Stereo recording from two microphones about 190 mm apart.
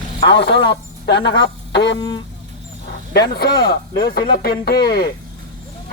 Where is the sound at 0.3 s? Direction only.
65° left (ahead or behind).